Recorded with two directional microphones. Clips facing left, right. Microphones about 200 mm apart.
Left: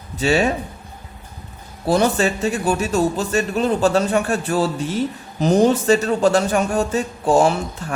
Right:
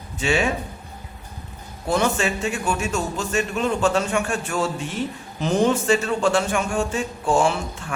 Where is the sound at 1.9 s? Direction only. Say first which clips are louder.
Left 4 dB; 35° left (ahead or behind).